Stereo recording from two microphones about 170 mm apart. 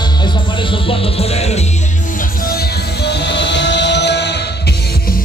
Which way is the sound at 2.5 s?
70° left (ahead or behind).